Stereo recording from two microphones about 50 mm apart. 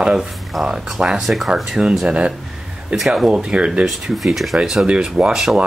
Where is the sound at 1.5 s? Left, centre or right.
Centre.